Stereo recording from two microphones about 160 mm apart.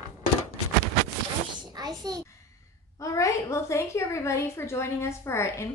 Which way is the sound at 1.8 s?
25° right (ahead or behind).